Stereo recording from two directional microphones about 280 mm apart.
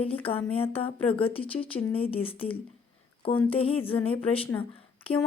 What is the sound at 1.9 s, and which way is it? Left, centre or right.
Speech, centre.